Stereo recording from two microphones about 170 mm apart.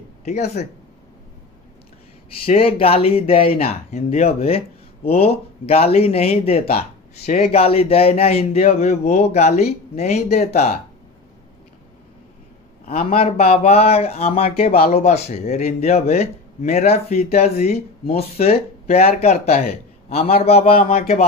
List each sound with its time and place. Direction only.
2.4 s a man's voice: 35° left (ahead or behind)
13.2 s a man's voice: 35° left (ahead or behind)